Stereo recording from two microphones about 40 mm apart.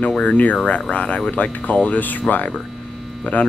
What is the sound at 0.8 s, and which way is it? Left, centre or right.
Speech, left.